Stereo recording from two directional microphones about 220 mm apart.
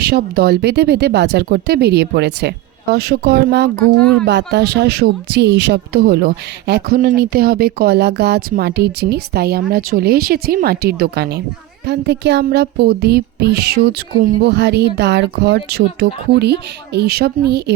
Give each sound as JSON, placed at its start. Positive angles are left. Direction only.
{"t": 0.0, "sound": "speech", "side_deg": -45}